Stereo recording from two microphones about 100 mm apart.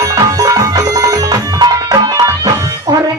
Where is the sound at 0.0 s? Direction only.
35° right (ahead or behind).